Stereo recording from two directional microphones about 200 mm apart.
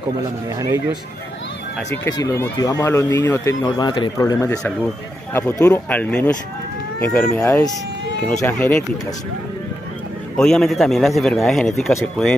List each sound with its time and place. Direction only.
2.0 s speech: 15° left (ahead or behind)
10.3 s a man's voice: 5° left (ahead or behind)